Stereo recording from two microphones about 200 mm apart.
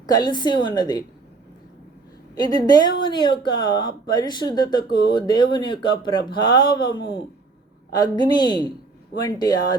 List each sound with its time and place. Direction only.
0.0 s speech: 20° left (ahead or behind)
2.4 s speech: 20° left (ahead or behind)